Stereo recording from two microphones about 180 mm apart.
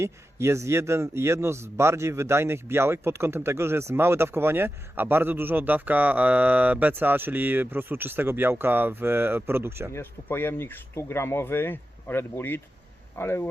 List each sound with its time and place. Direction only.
0.0 s a man's voice: 15° right (ahead or behind)
9.9 s speech: 10° left (ahead or behind)